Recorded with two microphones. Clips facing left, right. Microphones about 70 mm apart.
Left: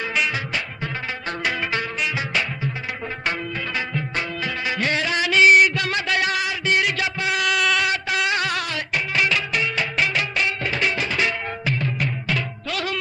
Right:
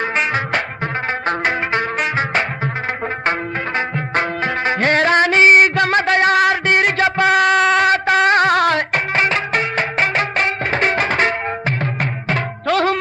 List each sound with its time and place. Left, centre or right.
0.0 s music: right
3.8 s music: right